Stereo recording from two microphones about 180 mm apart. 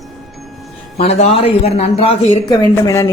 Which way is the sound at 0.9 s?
35° left (ahead or behind).